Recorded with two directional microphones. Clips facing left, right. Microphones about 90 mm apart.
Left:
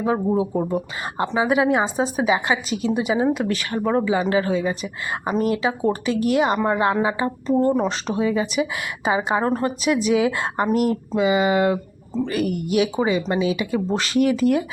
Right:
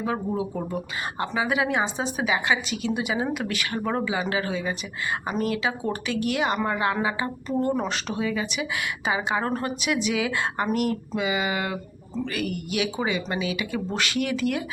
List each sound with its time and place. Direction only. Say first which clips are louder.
0.0 s a woman's voice: left 6 dB; 30° left (ahead or behind)
9.8 s a woman's voice: left 8 dB; 35° left (ahead or behind)